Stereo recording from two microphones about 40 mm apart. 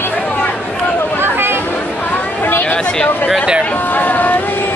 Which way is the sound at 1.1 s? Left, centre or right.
Right.